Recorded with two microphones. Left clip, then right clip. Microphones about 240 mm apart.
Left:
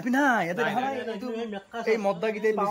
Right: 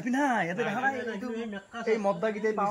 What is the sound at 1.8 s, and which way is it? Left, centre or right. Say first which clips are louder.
Speech: left 2 dB; centre.